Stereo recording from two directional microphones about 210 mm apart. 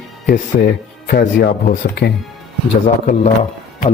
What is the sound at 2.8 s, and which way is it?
Speech, 35° left (ahead or behind).